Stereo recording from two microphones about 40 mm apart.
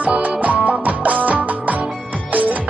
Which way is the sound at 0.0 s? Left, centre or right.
Right.